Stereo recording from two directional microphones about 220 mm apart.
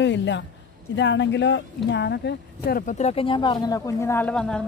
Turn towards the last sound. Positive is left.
turn(degrees=5)  # may be behind; listen again after turning